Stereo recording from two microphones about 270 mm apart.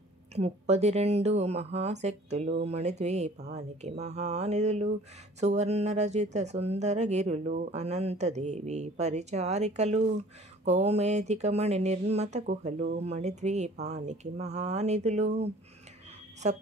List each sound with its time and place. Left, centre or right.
0.3 s speech: right